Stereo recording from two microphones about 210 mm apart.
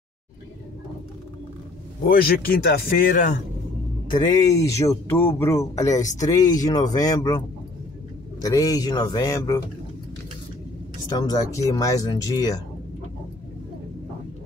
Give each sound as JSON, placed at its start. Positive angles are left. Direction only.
{"t": 2.0, "sound": "speech", "side_deg": 45}
{"t": 4.3, "sound": "speech", "side_deg": 15}
{"t": 11.1, "sound": "speech", "side_deg": 20}